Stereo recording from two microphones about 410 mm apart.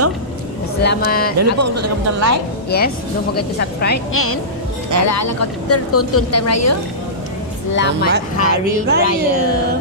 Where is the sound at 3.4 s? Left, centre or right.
Left.